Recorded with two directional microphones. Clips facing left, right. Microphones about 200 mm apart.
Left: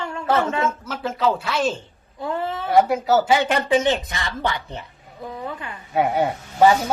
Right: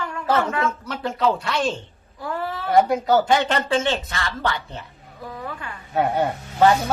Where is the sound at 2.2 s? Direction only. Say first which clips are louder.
Left 2 dB; 20° left (ahead or behind).